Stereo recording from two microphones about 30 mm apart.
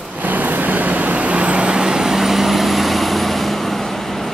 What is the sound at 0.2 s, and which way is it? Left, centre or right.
Vehicle, right.